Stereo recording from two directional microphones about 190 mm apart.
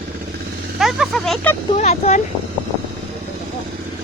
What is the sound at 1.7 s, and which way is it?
Speech, 35° left (ahead or behind).